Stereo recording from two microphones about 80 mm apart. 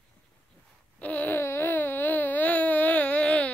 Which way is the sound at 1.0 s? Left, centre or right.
Centre.